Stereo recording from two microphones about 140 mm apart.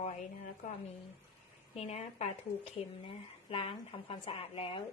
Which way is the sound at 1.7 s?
50° left (ahead or behind).